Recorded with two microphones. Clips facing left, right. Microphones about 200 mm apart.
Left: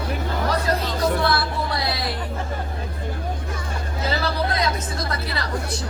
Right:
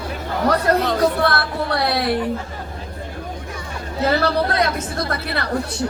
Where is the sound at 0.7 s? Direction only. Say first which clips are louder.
Right 5 dB; 65° right (ahead or behind).